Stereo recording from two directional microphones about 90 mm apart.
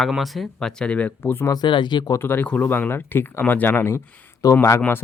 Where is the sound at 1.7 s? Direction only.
60° left (ahead or behind).